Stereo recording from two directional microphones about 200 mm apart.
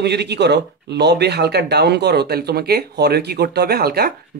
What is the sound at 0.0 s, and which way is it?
Speech, 55° right (ahead or behind).